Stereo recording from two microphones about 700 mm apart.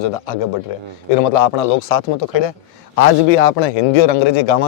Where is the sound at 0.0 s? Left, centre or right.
Left.